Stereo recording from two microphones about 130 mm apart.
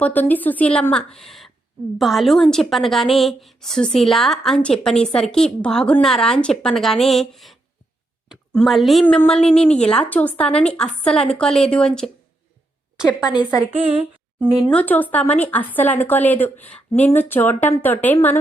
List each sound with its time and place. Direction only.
0.0 s a woman's voice: 15° left (ahead or behind)
9.6 s speech: 55° left (ahead or behind)
9.9 s a woman's voice: 10° left (ahead or behind)
13.2 s a woman's voice: 30° left (ahead or behind)
13.7 s a woman's voice: 50° right (ahead or behind)
14.7 s a woman's voice: 10° left (ahead or behind)